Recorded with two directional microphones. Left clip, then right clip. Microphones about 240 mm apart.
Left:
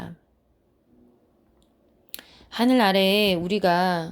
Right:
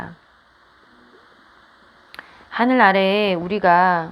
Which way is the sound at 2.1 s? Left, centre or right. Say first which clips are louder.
Right 7 dB; left.